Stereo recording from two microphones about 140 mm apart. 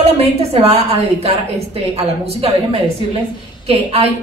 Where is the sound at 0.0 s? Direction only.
45° right (ahead or behind).